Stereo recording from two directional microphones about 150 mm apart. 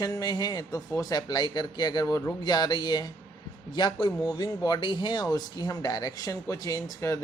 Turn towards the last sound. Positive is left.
turn(degrees=20)  # may be behind; listen again after turning